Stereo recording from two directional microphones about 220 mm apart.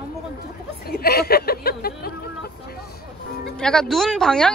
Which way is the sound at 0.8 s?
45° left (ahead or behind).